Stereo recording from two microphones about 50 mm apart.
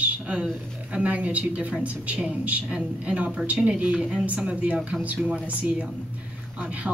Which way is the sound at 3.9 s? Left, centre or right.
Centre.